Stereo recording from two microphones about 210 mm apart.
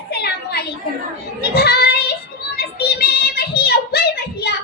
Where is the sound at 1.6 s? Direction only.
45° left (ahead or behind).